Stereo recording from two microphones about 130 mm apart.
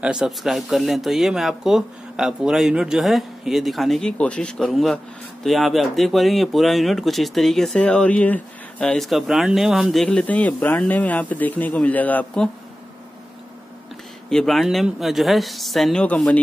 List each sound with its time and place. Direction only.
0.0 s speech: 5° right (ahead or behind); by 12.4 s 10° left (ahead or behind)
14.3 s speech: centre (ahead or behind)